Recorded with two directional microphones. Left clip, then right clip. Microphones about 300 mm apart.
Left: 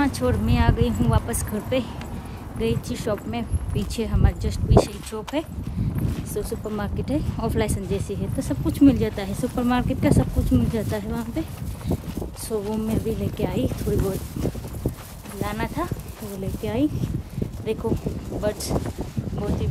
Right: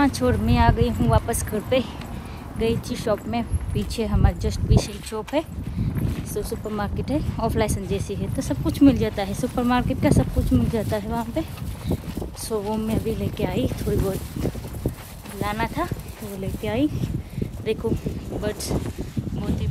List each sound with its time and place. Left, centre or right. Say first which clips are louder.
0.0 s speech: right 2 dB; centre; by 18.8 s left